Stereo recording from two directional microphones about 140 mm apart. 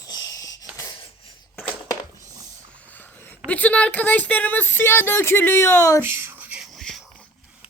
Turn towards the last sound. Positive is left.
turn(degrees=0)  # may be behind; listen again after turning